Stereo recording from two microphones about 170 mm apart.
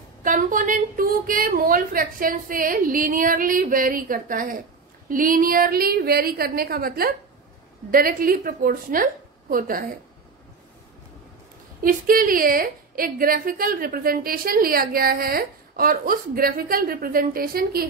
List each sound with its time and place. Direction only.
0.2 s a woman's voice: 50° right (ahead or behind)
11.8 s a woman's voice: 55° right (ahead or behind)